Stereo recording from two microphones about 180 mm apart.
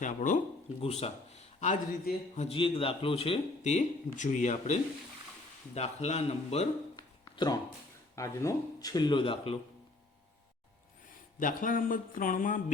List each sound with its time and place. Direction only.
0.0 s speech: 45° left (ahead or behind)
0.8 s speech: 35° left (ahead or behind)
2.5 s speech: 30° left (ahead or behind)
6.9 s a sound: 25° left (ahead or behind)
8.1 s speech: 15° left (ahead or behind)
11.3 s speech: 50° left (ahead or behind)